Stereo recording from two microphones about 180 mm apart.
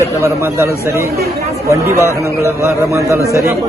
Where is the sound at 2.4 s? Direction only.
15° right (ahead or behind).